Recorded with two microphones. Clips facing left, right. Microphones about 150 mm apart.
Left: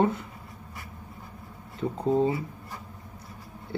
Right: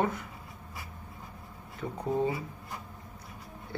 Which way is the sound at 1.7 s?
25° left (ahead or behind).